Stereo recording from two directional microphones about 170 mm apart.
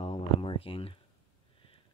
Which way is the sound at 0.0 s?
35° left (ahead or behind).